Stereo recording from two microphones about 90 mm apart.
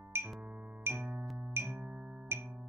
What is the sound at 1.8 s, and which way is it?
Music, 10° right (ahead or behind).